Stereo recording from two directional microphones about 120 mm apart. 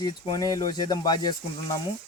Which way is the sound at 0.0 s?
35° left (ahead or behind).